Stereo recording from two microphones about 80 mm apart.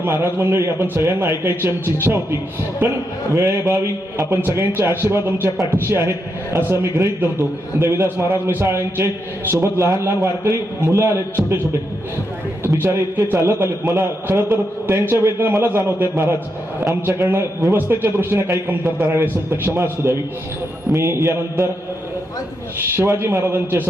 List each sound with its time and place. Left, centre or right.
0.0 s a man's voice: right
3.3 s a man's voice: right
7.8 s a man's voice: right
12.6 s a man's voice: right
23.0 s a man's voice: right